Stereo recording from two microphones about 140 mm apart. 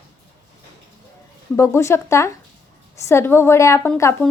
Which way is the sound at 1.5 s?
20° left (ahead or behind).